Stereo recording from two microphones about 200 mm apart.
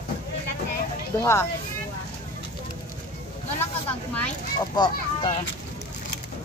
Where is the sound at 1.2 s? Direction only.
15° left (ahead or behind).